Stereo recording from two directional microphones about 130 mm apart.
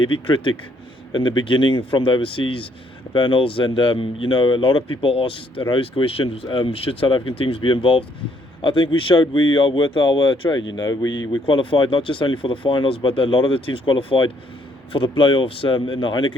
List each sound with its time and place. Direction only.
0.0 s speech: 40° left (ahead or behind)